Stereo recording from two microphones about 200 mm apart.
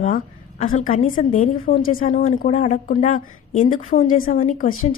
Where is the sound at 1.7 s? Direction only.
90° left.